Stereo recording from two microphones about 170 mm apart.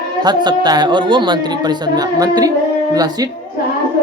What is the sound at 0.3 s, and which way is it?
Speech, 25° right (ahead or behind).